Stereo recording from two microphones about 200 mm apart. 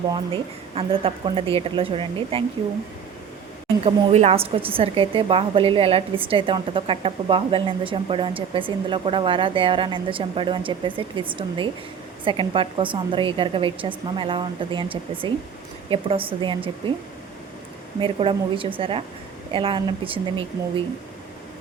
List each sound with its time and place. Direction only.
0.1 s a woman's voice: 30° right (ahead or behind)
3.8 s a woman's voice: 30° right (ahead or behind)
18.0 s a woman's voice: 25° right (ahead or behind)